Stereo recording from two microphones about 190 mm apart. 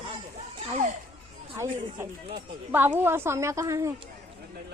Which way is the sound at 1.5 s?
15° right (ahead or behind).